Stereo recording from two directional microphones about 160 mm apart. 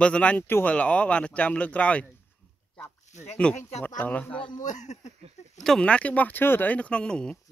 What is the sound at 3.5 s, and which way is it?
Speech, 5° left (ahead or behind).